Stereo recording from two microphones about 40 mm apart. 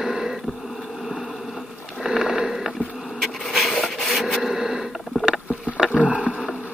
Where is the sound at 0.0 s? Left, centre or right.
Centre.